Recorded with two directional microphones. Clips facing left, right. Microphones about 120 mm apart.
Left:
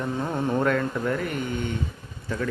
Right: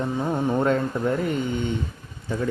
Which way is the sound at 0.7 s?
25° right (ahead or behind).